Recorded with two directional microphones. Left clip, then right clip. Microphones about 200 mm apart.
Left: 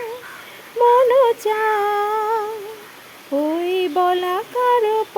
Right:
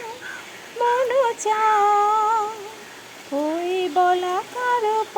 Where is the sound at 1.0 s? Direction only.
25° left (ahead or behind).